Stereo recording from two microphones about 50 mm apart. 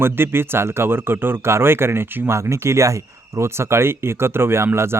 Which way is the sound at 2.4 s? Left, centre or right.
Right.